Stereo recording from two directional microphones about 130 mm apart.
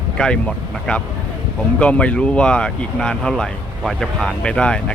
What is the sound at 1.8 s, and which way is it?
Speech, 10° left (ahead or behind).